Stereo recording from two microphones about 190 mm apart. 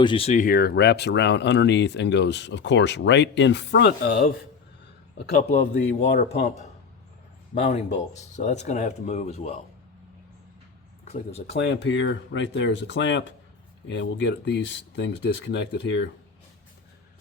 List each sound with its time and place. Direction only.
0.0 s speech: 30° left (ahead or behind)
0.3 s speech: 50° left (ahead or behind)
5.1 s a man's voice: 55° left (ahead or behind)
5.5 s speech: 65° left (ahead or behind)
7.5 s speech: 40° left (ahead or behind)
11.0 s speech: 35° left (ahead or behind)
11.6 s speech: 65° left (ahead or behind)